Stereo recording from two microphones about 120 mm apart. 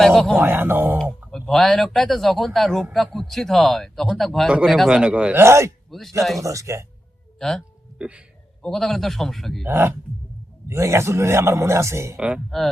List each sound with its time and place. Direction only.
0.0 s speech: 5° left (ahead or behind)
0.3 s speech: 15° right (ahead or behind)
1.3 s speech: centre (ahead or behind)
5.4 s a man's voice: 20° right (ahead or behind)
5.9 s speech: centre (ahead or behind)
6.4 s a man's voice: 25° right (ahead or behind)
7.3 s speech: 5° left (ahead or behind)
7.9 s speech: 10° right (ahead or behind)
8.6 s speech: 5° left (ahead or behind)
9.6 s a man's voice: 20° right (ahead or behind)
12.5 s speech: centre (ahead or behind)